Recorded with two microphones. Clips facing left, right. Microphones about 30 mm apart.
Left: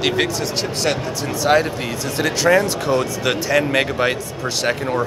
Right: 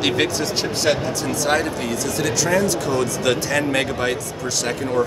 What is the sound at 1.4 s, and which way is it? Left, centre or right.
Speech, centre.